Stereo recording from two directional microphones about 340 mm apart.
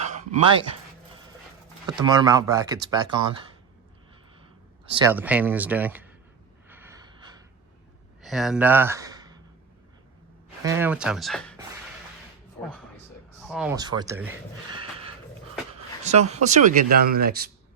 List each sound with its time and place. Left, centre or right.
0.0 s a sound: right
1.9 s speech: centre
4.9 s speech: centre
6.7 s gasp: centre
8.2 s speech: centre
10.6 s speech: centre
13.5 s speech: centre; by 17.5 s right